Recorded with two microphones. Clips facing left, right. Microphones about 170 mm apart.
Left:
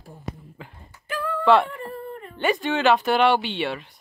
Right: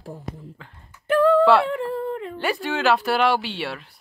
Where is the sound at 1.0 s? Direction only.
70° right (ahead or behind).